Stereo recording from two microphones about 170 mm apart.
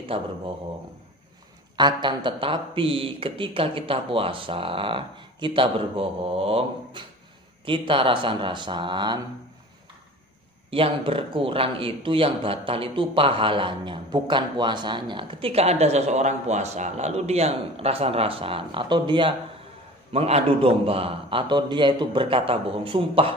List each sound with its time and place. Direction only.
0.1 s speech: 30° right (ahead or behind)
1.8 s speech: 25° right (ahead or behind)
10.7 s speech: 30° right (ahead or behind)